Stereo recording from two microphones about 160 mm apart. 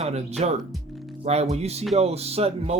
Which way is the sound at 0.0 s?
40° right (ahead or behind).